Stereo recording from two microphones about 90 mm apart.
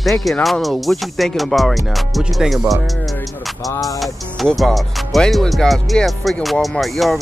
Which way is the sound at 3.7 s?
40° left (ahead or behind).